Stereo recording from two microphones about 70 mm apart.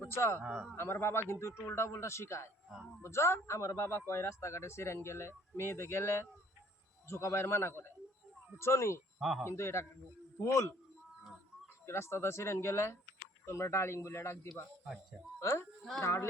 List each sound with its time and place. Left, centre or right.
0.1 s a man's voice: left
0.4 s speech: centre
0.8 s a man's voice: left
9.1 s speech: centre
9.5 s a man's voice: left
11.9 s a man's voice: left
15.8 s speech: centre
16.0 s a man's voice: left